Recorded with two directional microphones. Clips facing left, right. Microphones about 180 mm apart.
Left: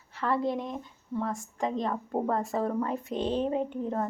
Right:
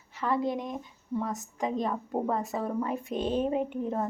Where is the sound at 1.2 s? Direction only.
20° right (ahead or behind).